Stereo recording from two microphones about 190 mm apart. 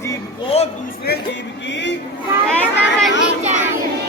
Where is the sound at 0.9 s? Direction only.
55° left (ahead or behind).